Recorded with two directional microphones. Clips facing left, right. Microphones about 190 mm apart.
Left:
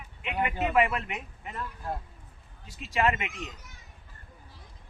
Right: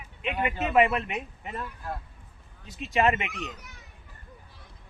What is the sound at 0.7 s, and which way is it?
Speech, 20° right (ahead or behind).